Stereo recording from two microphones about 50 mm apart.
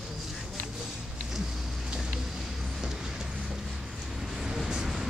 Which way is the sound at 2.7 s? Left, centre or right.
Centre.